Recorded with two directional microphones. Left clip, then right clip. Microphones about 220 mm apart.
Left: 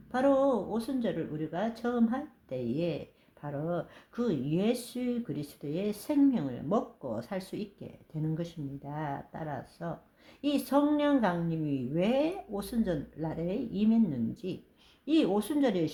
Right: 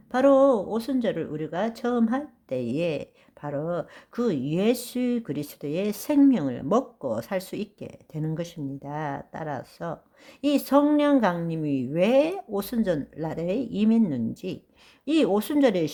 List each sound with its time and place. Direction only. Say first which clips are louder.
0.1 s speech: right 8 dB; 35° right (ahead or behind)